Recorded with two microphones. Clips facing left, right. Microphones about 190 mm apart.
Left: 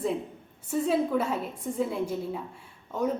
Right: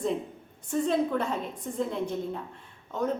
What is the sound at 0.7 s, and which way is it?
A woman's voice, 5° left (ahead or behind).